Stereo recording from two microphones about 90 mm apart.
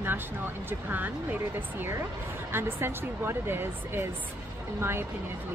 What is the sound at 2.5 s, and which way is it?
Speech, 25° right (ahead or behind).